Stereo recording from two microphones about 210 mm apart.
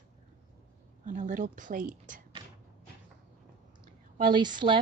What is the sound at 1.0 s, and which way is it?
Speech, 35° right (ahead or behind).